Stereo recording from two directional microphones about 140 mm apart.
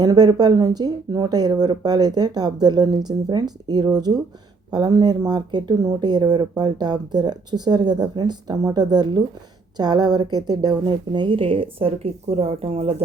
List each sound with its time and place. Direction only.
0.0 s a woman's voice: 30° right (ahead or behind); by 13.0 s 45° right (ahead or behind)